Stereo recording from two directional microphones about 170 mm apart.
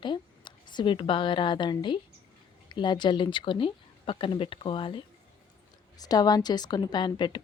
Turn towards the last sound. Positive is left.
turn(degrees=25)  # may be behind; listen again after turning